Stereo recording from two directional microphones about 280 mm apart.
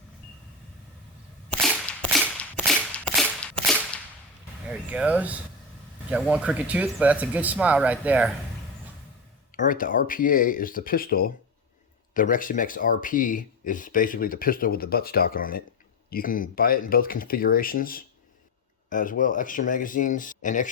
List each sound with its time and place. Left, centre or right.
1.5 s cap gun: centre
3.4 s whip: centre
4.9 s speech: centre
9.6 s speech: left